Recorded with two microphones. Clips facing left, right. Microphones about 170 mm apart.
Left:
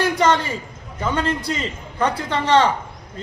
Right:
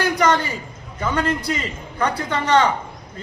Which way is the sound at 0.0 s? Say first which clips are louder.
Left 1 dB; 25° left (ahead or behind).